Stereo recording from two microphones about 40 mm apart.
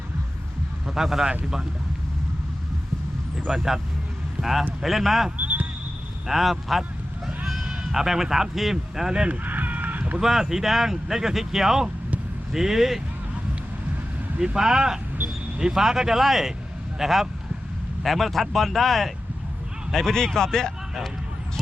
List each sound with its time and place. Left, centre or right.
0.9 s speech: centre
3.5 s a man's voice: centre
5.4 s basketball bounce: right
6.2 s speech: centre
7.3 s sheep: centre
7.9 s speech: centre
9.3 s a sound: right
10.2 s speech: centre
14.3 s speech: centre